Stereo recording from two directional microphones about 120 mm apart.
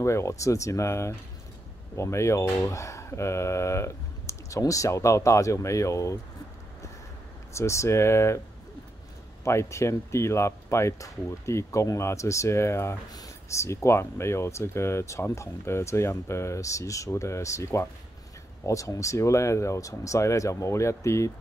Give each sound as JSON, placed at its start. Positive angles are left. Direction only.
{"t": 0.0, "sound": "speech", "side_deg": 25}
{"t": 7.5, "sound": "speech", "side_deg": 25}
{"t": 9.4, "sound": "speech", "side_deg": 25}